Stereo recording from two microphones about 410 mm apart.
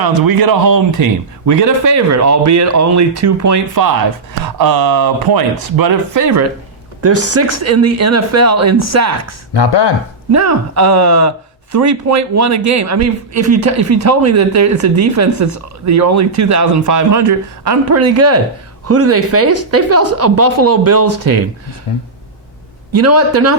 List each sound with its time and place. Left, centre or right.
0.0 s speech: right
9.5 s speech: left
10.3 s speech: right
22.9 s speech: right